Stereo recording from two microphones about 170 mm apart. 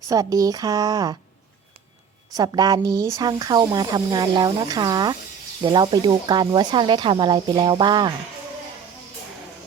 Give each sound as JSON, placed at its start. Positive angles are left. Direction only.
{"t": 0.1, "sound": "speech", "side_deg": -20}
{"t": 2.3, "sound": "speech", "side_deg": -25}